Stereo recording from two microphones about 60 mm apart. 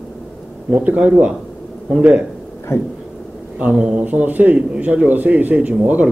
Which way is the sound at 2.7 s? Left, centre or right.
Left.